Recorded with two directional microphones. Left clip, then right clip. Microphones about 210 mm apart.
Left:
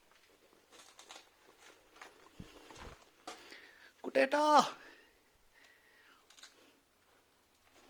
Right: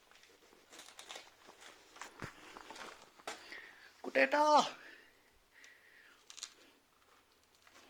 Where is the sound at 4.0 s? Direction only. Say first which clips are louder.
Even; 35° left (ahead or behind).